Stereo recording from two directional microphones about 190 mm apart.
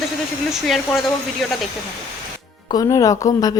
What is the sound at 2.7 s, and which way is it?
Speech, 20° left (ahead or behind).